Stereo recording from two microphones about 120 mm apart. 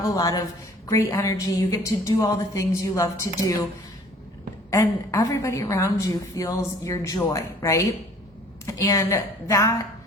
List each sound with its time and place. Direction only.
0.0 s a woman's voice: 30° left (ahead or behind)
4.7 s a woman's voice: 20° left (ahead or behind)